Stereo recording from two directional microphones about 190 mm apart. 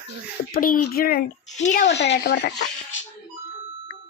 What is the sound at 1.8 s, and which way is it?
Speech, 65° left (ahead or behind).